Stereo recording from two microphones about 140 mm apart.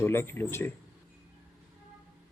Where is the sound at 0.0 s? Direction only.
15° left (ahead or behind).